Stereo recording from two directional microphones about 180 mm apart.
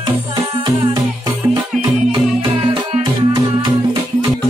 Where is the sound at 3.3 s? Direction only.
25° right (ahead or behind).